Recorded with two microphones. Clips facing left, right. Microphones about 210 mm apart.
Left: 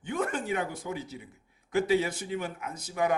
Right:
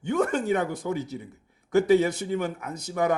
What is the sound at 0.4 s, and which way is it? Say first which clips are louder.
Speech: right 6 dB; 50° right (ahead or behind).